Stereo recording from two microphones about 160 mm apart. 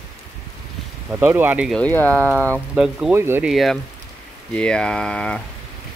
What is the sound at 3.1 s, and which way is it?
Speech, 15° right (ahead or behind).